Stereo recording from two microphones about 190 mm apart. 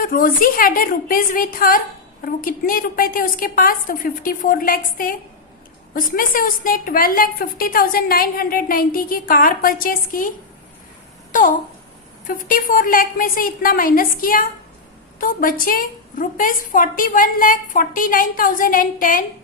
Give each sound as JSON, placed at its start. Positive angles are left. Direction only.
{"t": 0.0, "sound": "a woman's voice", "side_deg": 45}
{"t": 11.3, "sound": "a sound", "side_deg": 45}
{"t": 12.3, "sound": "a woman's voice", "side_deg": 45}